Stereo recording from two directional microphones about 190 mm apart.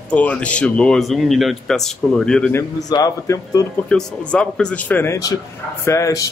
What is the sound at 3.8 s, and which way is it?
A man's voice, 5° left (ahead or behind).